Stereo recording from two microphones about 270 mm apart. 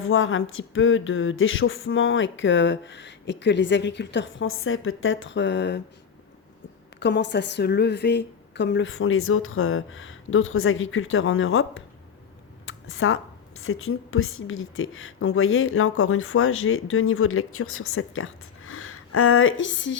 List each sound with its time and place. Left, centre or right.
0.0 s speech: left
7.0 s speech: left
12.6 s a sound: left
13.6 s speech: left